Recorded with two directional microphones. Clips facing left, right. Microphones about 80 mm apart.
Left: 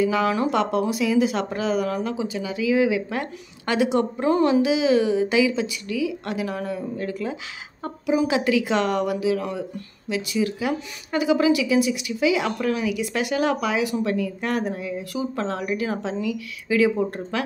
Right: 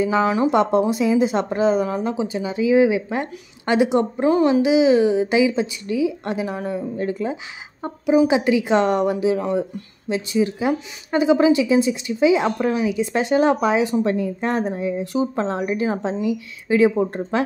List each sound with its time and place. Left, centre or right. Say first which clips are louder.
0.0 s speech: right 3 dB; right